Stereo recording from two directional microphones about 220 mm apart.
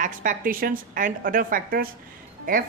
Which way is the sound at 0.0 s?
40° right (ahead or behind).